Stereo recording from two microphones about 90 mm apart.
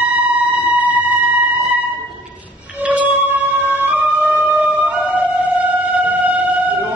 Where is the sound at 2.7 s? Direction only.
15° right (ahead or behind).